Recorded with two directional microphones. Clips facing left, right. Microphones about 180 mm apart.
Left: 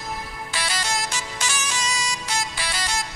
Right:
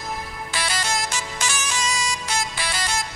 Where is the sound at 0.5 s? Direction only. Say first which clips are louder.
Right 1 dB; 50° right (ahead or behind).